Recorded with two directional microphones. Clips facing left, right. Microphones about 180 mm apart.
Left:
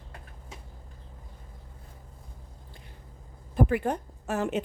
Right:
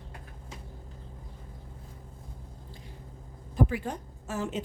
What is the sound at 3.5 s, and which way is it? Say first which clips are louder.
A woman's voice: left 3 dB; 55° left (ahead or behind).